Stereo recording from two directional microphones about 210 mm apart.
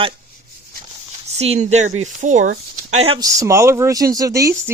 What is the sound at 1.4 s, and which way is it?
Speech, 30° right (ahead or behind).